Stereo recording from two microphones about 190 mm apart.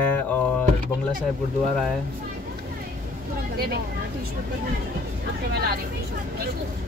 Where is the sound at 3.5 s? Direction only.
55° right (ahead or behind).